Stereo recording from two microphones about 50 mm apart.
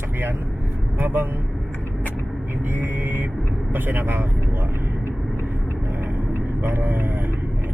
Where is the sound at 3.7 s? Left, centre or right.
Right.